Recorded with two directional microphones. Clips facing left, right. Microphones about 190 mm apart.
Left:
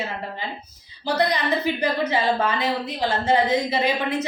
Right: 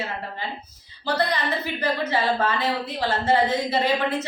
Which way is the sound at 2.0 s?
15° left (ahead or behind).